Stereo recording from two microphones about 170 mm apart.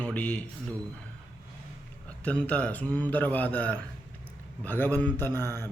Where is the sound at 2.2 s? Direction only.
10° left (ahead or behind).